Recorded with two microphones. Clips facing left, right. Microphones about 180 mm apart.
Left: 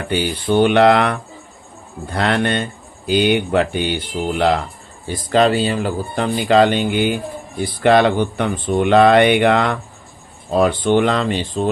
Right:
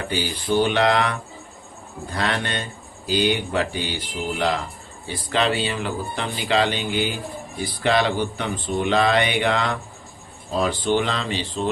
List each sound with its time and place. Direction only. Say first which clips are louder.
0.1 s speech: left 6 dB; 60° left (ahead or behind)
2.1 s speech: left 7 dB; 60° left (ahead or behind)
5.0 s speech: left 7 dB; 45° left (ahead or behind)